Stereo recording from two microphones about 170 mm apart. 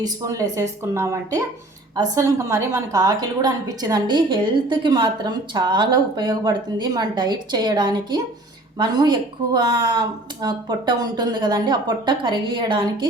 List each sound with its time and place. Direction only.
0.0 s a woman's voice: 20° right (ahead or behind)